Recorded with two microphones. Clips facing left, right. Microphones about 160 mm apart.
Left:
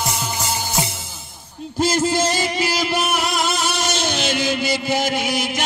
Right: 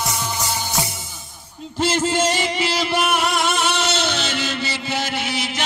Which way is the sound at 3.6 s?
10° left (ahead or behind).